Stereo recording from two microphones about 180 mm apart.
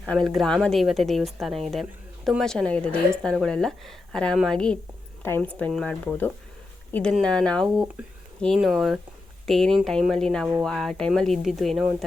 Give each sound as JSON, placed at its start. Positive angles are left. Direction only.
{"t": 0.0, "sound": "a woman's voice", "side_deg": 0}